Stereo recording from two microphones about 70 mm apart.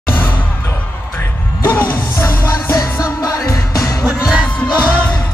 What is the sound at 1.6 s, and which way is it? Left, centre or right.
Music, left.